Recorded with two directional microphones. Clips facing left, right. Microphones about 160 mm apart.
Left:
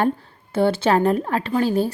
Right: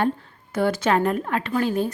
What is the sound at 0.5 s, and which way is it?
Speech, 30° left (ahead or behind).